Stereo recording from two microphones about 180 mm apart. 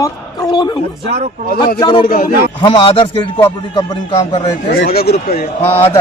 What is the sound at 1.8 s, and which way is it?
Music, 25° left (ahead or behind).